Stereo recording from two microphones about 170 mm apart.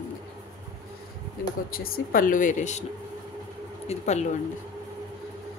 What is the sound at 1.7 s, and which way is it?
A woman's voice, 60° left (ahead or behind).